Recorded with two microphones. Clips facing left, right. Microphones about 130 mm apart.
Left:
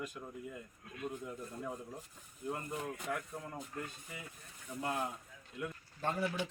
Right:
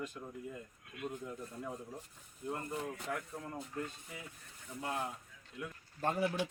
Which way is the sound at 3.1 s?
15° left (ahead or behind).